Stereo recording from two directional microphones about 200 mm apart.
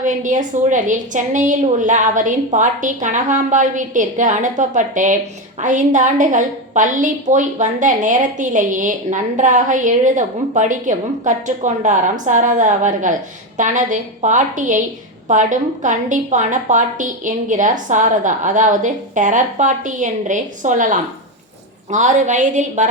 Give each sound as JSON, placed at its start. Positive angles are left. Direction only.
{"t": 0.0, "sound": "a woman's voice", "side_deg": -40}